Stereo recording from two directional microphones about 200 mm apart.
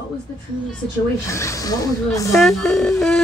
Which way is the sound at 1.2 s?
15° left (ahead or behind).